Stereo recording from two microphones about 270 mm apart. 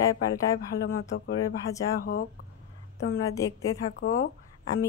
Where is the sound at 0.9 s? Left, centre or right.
Left.